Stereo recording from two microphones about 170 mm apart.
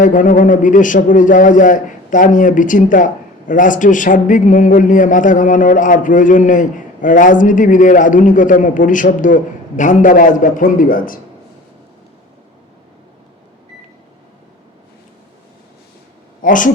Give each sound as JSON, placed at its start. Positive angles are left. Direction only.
{"t": 0.0, "sound": "speech", "side_deg": 50}
{"t": 16.4, "sound": "a man's voice", "side_deg": 50}